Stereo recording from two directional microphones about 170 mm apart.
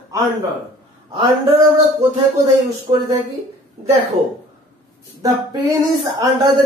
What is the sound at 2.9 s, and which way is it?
Speech, 30° right (ahead or behind).